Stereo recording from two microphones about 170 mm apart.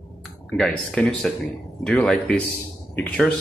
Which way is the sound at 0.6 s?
5° left (ahead or behind).